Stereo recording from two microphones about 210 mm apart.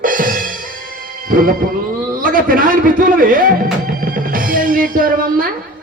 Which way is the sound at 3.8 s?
40° right (ahead or behind).